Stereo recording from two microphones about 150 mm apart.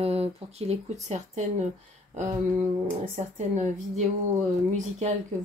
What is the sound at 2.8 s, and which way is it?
Speech, 55° right (ahead or behind).